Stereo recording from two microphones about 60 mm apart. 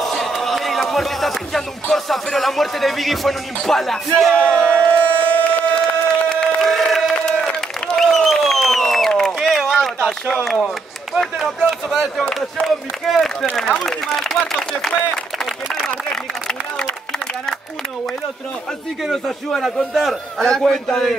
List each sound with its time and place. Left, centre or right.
0.0 s a man's voice: centre
4.4 s crowd: centre
5.8 s applause: centre
6.7 s crowd: centre
7.2 s a sound: centre
11.1 s a man's voice: centre
15.3 s a sound: centre
19.0 s a man's voice: centre